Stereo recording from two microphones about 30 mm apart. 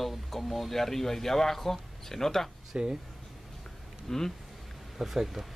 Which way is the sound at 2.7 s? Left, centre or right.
Right.